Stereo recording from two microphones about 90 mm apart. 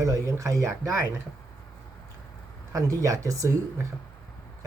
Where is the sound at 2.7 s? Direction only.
40° right (ahead or behind).